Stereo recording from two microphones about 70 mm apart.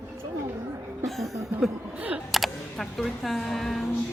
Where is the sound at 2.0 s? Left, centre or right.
Right.